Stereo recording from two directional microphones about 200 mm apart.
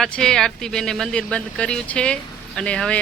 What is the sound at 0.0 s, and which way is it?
Speech, 5° left (ahead or behind).